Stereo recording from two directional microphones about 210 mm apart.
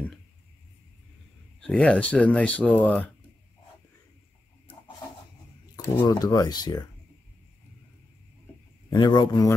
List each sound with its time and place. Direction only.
1.6 s speech: 5° left (ahead or behind)
5.9 s speech: 15° left (ahead or behind)
8.9 s speech: 20° left (ahead or behind)